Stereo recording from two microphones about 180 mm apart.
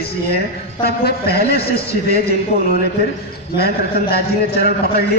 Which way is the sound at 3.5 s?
60° left (ahead or behind).